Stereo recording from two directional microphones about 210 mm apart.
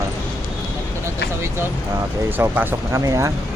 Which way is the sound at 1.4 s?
10° right (ahead or behind).